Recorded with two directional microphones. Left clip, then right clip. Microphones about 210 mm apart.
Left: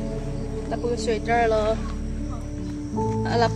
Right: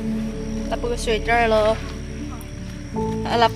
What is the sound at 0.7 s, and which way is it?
Speech, 35° right (ahead or behind).